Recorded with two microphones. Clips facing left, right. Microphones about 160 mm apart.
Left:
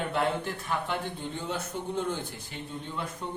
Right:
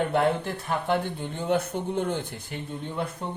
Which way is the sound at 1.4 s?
55° right (ahead or behind).